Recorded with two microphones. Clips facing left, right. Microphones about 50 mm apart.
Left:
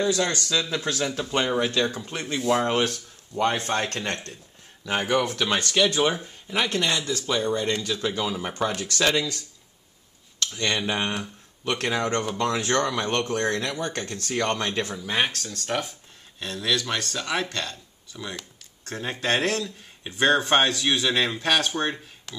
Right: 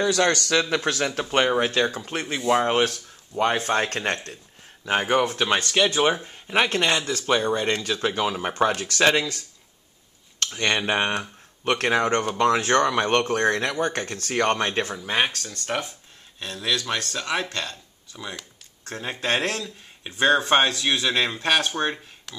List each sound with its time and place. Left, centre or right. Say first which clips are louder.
0.0 s speech: right 3 dB; right
1.6 s speech: right 2 dB; right
2.3 s speech: right 2 dB; centre; by 9.4 s right
10.4 s speech: right 2 dB; right
15.1 s speech: right 1 dB; centre